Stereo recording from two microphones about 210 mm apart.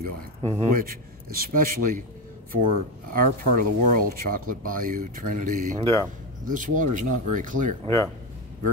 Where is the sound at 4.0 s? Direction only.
40° right (ahead or behind).